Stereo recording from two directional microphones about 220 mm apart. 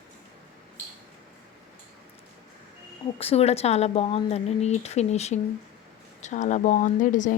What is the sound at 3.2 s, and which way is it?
Speech, 25° left (ahead or behind).